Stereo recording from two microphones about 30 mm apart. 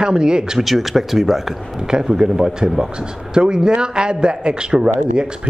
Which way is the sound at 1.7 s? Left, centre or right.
Right.